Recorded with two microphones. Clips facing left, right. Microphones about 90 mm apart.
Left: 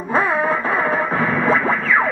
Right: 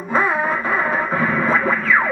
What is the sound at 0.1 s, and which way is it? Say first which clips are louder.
Music: left 1 dB; 45° left (ahead or behind).